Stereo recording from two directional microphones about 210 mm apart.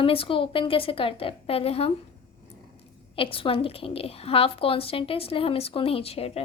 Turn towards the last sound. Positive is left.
turn(degrees=30)  # may be behind; listen again after turning